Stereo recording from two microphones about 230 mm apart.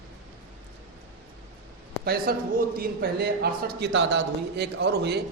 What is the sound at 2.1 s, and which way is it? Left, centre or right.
A man's voice, right.